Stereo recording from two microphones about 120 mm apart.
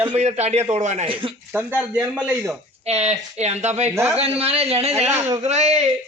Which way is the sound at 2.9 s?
65° right (ahead or behind).